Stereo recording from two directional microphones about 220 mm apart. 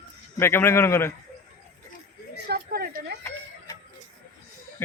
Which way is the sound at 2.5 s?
45° right (ahead or behind).